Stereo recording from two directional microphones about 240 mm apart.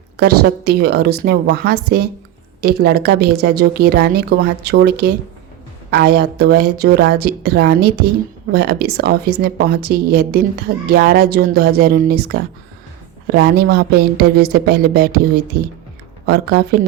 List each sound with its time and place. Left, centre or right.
0.2 s speech: right
16.2 s speech: right